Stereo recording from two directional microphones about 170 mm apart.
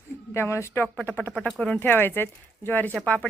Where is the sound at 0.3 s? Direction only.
15° left (ahead or behind).